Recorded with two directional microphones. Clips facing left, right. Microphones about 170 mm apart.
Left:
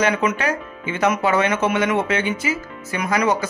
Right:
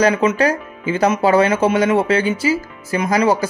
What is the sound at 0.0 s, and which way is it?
Speech, 30° right (ahead or behind).